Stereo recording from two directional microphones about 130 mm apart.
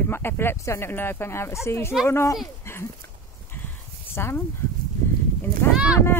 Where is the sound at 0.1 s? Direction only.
15° left (ahead or behind).